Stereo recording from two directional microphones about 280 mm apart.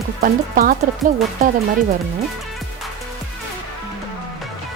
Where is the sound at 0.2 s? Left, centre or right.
Right.